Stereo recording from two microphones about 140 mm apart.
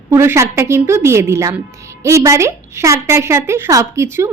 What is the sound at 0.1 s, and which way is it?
A woman's voice, 20° right (ahead or behind).